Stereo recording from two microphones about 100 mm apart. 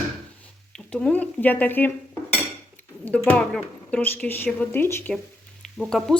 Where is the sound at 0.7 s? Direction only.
10° left (ahead or behind).